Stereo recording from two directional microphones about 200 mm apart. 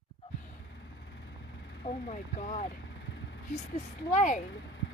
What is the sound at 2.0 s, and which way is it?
Vehicle, 35° left (ahead or behind).